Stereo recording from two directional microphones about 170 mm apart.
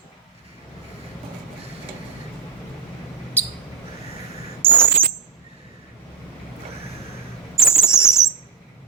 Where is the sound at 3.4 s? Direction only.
10° left (ahead or behind).